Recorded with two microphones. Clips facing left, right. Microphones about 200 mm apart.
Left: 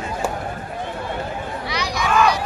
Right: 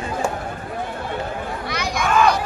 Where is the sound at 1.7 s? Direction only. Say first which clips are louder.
Right 1 dB; 50° right (ahead or behind).